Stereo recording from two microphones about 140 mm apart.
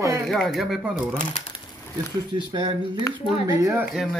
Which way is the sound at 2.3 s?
35° right (ahead or behind).